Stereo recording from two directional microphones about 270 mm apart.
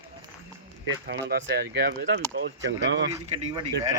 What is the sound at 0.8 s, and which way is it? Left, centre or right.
Speech, right.